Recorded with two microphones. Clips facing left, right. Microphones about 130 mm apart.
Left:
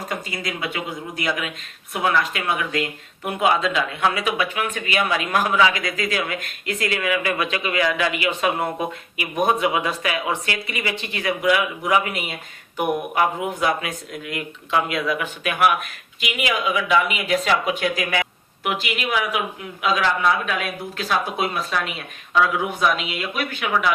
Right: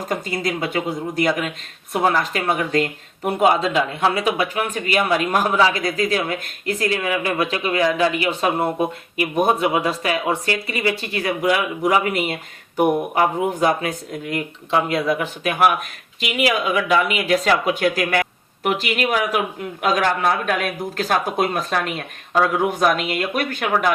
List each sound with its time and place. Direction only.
0.1 s speech: 40° right (ahead or behind)